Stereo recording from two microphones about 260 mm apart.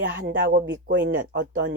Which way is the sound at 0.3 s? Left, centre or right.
Right.